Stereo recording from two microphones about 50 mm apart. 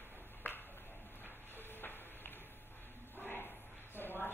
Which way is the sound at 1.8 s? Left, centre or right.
Left.